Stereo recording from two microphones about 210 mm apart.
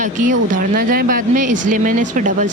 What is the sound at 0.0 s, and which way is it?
Speech, 35° right (ahead or behind).